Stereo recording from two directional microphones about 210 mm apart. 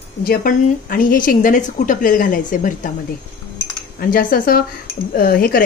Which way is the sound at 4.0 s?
40° left (ahead or behind).